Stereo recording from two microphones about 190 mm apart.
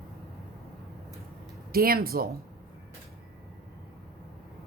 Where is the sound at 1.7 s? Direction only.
50° right (ahead or behind).